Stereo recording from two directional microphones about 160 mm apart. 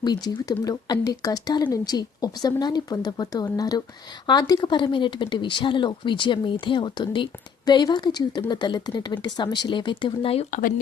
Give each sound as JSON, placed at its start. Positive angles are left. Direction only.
{"t": 0.0, "sound": "speech", "side_deg": 25}
{"t": 10.5, "sound": "speech", "side_deg": 60}